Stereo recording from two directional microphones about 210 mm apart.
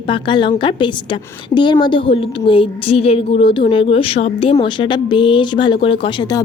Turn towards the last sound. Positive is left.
turn(degrees=20)  # may be behind; listen again after turning